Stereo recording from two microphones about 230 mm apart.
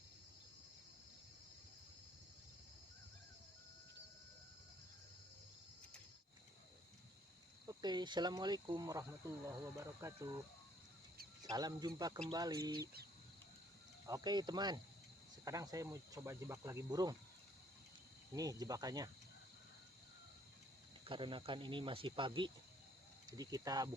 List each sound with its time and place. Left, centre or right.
7.7 s speech: centre
11.4 s speech: centre
14.1 s speech: centre
18.3 s speech: centre
21.0 s speech: right